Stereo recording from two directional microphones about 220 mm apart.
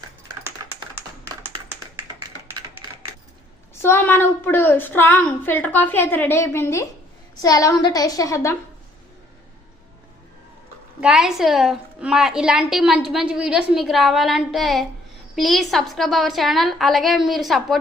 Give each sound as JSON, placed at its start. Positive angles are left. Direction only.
{"t": 3.8, "sound": "a woman's voice", "side_deg": 10}
{"t": 11.0, "sound": "a woman's voice", "side_deg": -5}